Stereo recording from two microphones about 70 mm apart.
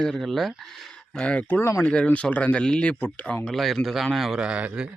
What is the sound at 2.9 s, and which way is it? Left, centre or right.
Speech, left.